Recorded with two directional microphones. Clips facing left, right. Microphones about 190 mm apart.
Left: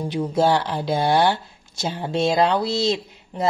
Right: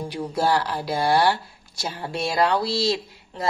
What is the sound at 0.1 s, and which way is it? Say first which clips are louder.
Speech: left 4 dB; 20° left (ahead or behind).